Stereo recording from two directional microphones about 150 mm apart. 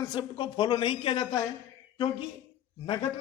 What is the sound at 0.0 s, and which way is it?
A woman's voice, 30° left (ahead or behind).